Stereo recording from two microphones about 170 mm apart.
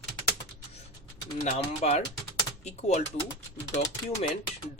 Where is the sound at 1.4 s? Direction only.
40° left (ahead or behind).